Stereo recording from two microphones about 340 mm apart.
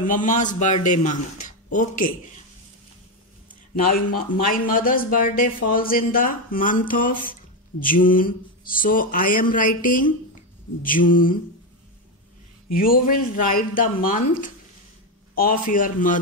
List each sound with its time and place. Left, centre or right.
0.0 s speech: left
3.7 s speech: left
12.7 s speech: left
15.7 s speech: left